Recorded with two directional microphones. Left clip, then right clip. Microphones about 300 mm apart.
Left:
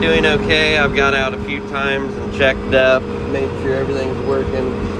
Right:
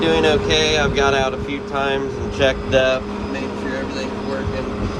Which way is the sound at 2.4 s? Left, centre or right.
Centre.